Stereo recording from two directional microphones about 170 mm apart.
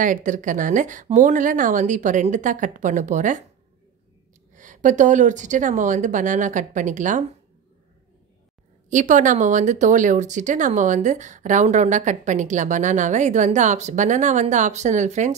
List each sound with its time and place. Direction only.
0.0 s speech: 50° right (ahead or behind)
4.6 s speech: 50° right (ahead or behind)
8.9 s speech: 45° right (ahead or behind)